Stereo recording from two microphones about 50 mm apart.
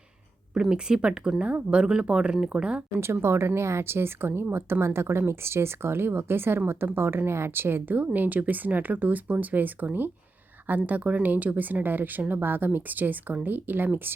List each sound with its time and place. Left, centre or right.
0.5 s speech: centre
3.0 s speech: right